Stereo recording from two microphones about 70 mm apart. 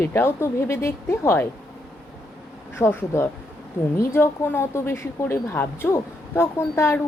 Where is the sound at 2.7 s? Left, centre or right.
Left.